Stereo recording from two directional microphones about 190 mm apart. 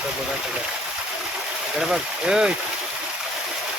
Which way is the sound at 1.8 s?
5° right (ahead or behind).